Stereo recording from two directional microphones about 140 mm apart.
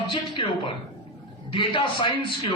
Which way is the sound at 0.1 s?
35° left (ahead or behind).